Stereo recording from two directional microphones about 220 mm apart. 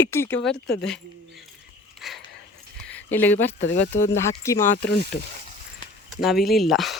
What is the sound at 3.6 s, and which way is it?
Speech, 50° left (ahead or behind).